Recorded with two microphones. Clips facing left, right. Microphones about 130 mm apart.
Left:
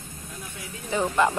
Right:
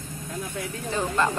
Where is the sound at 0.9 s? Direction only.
15° left (ahead or behind).